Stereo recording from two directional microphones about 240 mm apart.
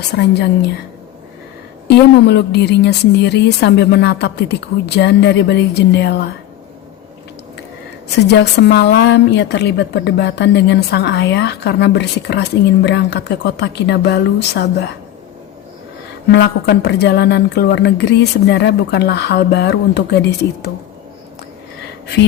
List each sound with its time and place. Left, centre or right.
0.1 s a woman's voice: left
2.2 s a woman's voice: left
8.3 s a woman's voice: left
16.3 s a woman's voice: left